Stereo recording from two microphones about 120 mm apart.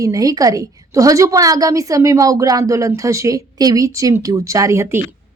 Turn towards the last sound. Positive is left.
turn(degrees=-25)  # may be behind; listen again after turning